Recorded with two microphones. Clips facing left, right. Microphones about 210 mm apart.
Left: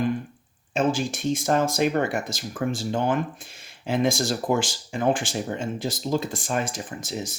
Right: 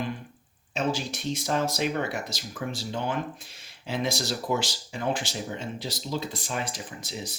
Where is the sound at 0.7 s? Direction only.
50° left (ahead or behind).